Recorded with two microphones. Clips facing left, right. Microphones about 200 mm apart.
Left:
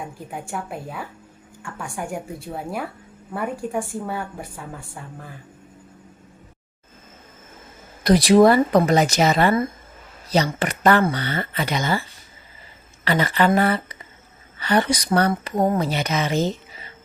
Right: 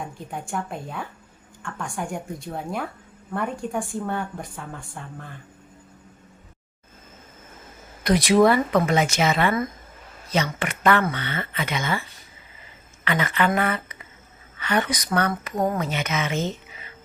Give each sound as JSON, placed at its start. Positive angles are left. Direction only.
{"t": 0.3, "sound": "a woman's voice", "side_deg": 5}
{"t": 8.0, "sound": "speech", "side_deg": 35}
{"t": 13.1, "sound": "speech", "side_deg": 35}